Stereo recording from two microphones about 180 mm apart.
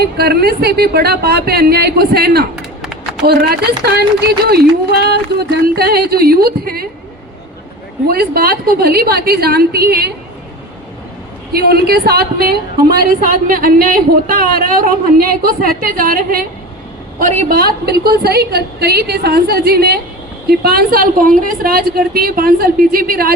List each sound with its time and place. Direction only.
0.2 s a woman's voice: 60° right (ahead or behind)
2.6 s a sound: centre (ahead or behind)
3.2 s a woman's voice: 60° right (ahead or behind)
8.0 s a woman's voice: 55° right (ahead or behind)
11.5 s a woman's voice: 60° right (ahead or behind)